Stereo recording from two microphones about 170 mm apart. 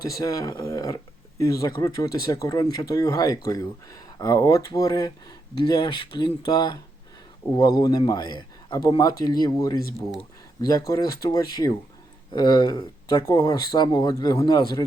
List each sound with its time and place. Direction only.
0.1 s speech: 20° left (ahead or behind)